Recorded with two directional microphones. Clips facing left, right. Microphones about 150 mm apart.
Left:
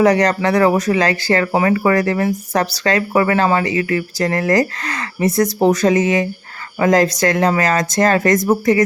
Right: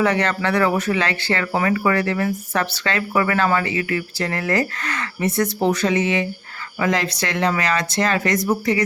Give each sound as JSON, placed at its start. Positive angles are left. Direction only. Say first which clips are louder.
{"t": 0.0, "sound": "speech", "louder": "left 6 dB", "side_deg": 40}